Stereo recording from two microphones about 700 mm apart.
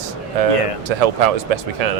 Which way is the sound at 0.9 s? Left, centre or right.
Right.